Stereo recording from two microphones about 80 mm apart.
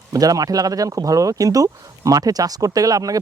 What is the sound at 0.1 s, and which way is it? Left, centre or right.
Speech, right.